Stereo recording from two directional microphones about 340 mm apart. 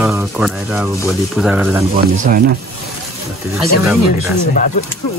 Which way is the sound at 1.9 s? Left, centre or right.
Right.